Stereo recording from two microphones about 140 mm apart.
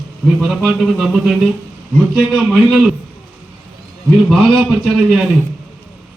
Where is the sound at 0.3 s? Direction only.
Centre (ahead or behind).